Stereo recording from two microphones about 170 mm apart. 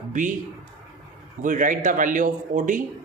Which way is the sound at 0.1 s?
45° right (ahead or behind).